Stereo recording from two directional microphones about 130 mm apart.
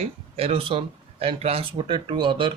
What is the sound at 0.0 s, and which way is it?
A man's voice, 50° right (ahead or behind).